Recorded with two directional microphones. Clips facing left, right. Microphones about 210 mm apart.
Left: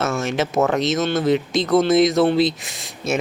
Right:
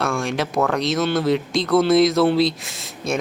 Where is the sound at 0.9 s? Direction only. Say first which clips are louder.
Even; 20° left (ahead or behind).